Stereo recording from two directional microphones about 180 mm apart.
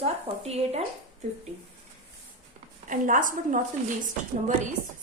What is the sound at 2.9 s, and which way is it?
Speech, 45° right (ahead or behind).